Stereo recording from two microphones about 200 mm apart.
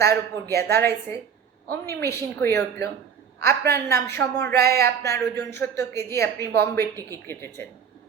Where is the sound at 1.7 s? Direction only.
15° left (ahead or behind).